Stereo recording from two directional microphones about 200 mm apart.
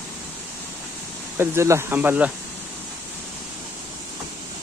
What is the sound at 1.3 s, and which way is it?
Speech, 15° right (ahead or behind).